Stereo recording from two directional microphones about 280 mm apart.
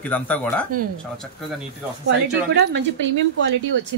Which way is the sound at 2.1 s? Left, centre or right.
Right.